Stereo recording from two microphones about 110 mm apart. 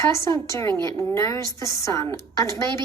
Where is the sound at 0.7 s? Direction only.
40° right (ahead or behind).